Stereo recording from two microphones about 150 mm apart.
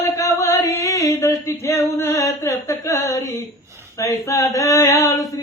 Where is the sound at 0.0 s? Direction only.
20° left (ahead or behind).